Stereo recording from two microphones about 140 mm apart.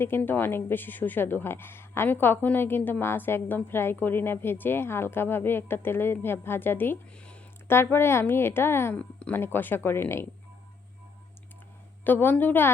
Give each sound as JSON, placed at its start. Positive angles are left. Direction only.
{"t": 0.0, "sound": "a woman's voice", "side_deg": 15}
{"t": 12.0, "sound": "a woman's voice", "side_deg": 15}